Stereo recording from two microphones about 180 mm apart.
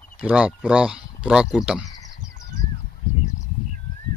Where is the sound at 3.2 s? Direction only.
40° left (ahead or behind).